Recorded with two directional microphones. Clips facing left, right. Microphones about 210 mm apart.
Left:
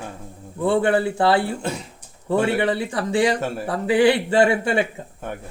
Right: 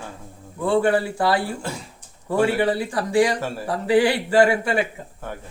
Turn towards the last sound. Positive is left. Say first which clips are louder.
# left 2 dB
turn(degrees=20)  # may be behind; listen again after turning